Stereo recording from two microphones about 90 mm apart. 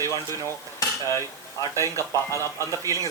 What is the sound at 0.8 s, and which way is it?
Cutlery, 35° left (ahead or behind).